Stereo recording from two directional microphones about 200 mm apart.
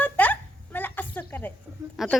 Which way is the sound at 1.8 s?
15° right (ahead or behind).